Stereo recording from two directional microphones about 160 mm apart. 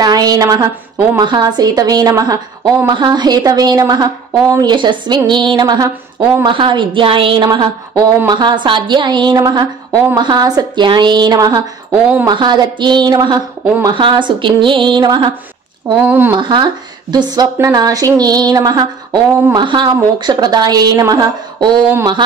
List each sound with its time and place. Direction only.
0.0 s a woman's voice: 25° right (ahead or behind)
11.9 s speech: 10° right (ahead or behind)
12.3 s a woman's voice: 25° right (ahead or behind)
15.9 s speech: 10° right (ahead or behind)
16.3 s a woman's voice: 30° right (ahead or behind)